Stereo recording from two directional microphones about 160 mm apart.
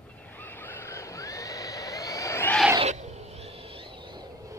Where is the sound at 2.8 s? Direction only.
45° right (ahead or behind); by 4.2 s 30° right (ahead or behind).